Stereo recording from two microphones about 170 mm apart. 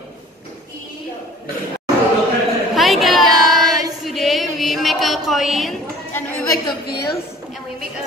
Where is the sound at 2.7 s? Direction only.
Centre (ahead or behind).